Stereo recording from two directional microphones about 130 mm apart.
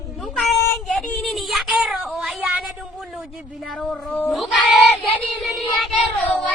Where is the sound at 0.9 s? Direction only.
5° left (ahead or behind).